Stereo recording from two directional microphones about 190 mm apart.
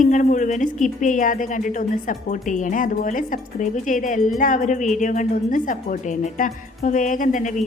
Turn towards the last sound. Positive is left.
turn(degrees=40)  # may be behind; listen again after turning